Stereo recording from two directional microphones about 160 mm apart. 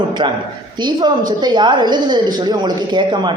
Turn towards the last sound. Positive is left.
turn(degrees=-30)  # may be behind; listen again after turning